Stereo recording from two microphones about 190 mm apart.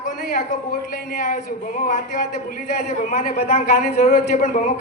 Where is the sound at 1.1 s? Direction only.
45° left (ahead or behind).